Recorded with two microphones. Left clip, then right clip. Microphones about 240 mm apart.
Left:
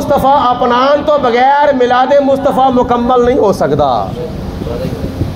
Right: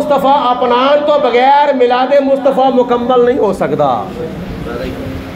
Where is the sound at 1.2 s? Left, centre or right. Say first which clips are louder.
Even; left.